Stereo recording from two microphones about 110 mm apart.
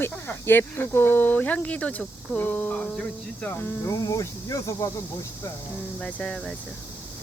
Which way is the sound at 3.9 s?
30° left (ahead or behind).